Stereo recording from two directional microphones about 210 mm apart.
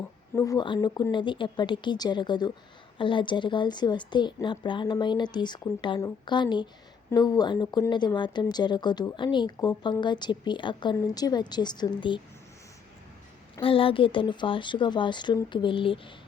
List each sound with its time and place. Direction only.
0.3 s speech: 15° left (ahead or behind)
13.6 s speech: 25° left (ahead or behind)